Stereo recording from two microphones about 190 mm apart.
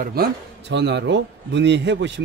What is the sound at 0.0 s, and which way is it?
A man's voice, 55° right (ahead or behind).